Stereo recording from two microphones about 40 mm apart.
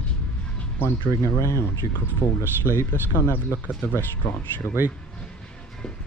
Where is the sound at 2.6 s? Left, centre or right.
Left.